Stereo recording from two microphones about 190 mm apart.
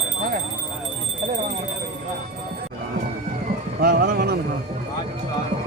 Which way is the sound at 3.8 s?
50° right (ahead or behind).